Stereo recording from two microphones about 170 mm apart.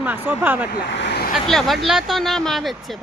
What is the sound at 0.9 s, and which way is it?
Vehicle, 85° left.